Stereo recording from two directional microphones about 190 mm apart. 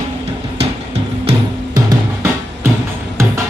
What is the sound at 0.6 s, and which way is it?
Music, 30° right (ahead or behind).